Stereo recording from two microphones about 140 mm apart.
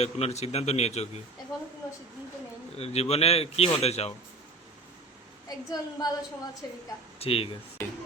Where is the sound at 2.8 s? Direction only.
50° left (ahead or behind).